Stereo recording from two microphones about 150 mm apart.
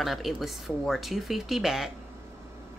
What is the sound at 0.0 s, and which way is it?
A woman's voice, centre (ahead or behind).